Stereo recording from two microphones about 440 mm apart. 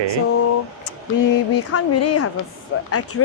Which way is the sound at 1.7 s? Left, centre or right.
Left.